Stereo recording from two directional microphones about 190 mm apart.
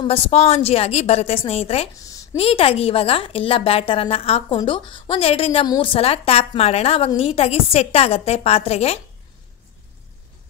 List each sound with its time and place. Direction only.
0.0 s a woman's voice: 30° left (ahead or behind)
2.0 s a sound: 15° left (ahead or behind)
2.3 s a woman's voice: 30° left (ahead or behind)